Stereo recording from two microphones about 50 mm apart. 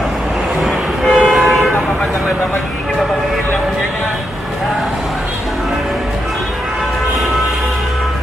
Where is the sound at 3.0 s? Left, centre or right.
Centre.